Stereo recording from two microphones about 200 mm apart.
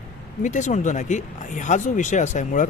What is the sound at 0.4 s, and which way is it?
Speech, 40° left (ahead or behind).